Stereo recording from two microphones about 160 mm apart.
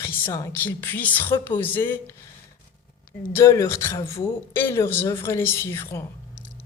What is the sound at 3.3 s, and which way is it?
A woman's voice, 20° left (ahead or behind).